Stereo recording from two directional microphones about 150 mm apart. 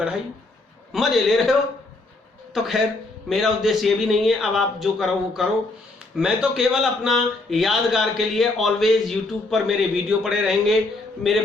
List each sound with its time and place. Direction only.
0.9 s a man's voice: centre (ahead or behind)